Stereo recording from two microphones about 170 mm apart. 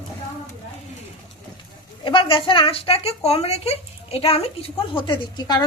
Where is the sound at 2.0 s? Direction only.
30° left (ahead or behind).